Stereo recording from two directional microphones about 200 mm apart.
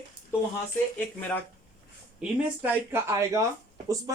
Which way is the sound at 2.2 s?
10° right (ahead or behind).